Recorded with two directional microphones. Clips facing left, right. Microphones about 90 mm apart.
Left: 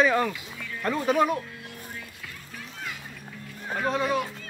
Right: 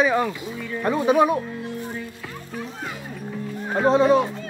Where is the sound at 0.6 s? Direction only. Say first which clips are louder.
Right 8 dB; 30° right (ahead or behind).